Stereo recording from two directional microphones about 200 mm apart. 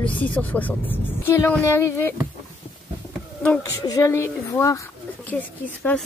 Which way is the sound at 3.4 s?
15° left (ahead or behind).